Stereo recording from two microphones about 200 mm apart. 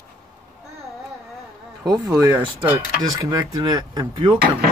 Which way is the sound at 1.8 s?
20° right (ahead or behind).